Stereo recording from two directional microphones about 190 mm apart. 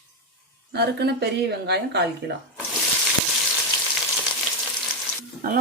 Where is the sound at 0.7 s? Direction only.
60° right (ahead or behind).